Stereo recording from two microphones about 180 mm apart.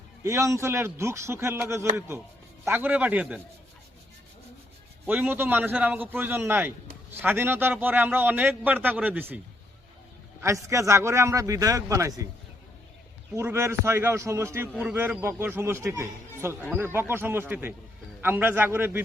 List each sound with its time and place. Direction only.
0.2 s a man's voice: 15° right (ahead or behind)
5.0 s a man's voice: 10° right (ahead or behind)
10.4 s a man's voice: 15° right (ahead or behind)
13.3 s a man's voice: 15° right (ahead or behind)